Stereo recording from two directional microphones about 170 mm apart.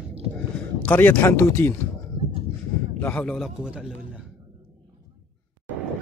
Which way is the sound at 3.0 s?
10° left (ahead or behind).